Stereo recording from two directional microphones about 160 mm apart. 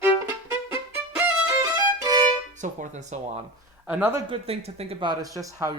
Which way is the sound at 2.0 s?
25° right (ahead or behind).